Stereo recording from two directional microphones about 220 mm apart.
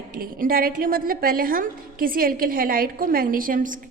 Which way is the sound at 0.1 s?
40° right (ahead or behind).